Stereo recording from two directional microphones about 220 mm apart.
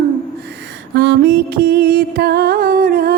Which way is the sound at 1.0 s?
50° right (ahead or behind).